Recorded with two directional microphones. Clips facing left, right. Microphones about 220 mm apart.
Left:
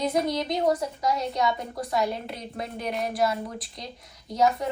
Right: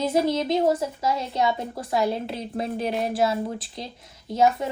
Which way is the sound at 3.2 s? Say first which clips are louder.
Right 3 dB; 25° right (ahead or behind).